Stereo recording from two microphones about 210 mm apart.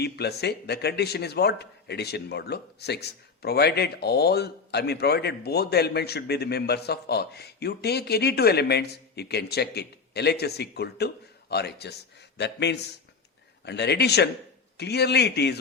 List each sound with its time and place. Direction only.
0.0 s a man's voice: 50° left (ahead or behind)